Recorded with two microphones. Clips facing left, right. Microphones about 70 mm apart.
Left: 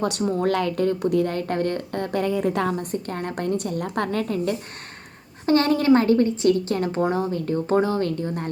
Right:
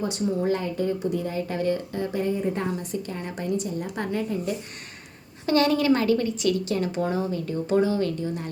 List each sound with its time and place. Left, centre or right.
0.0 s a woman's voice: left
2.9 s a woman's voice: left
5.5 s a woman's voice: left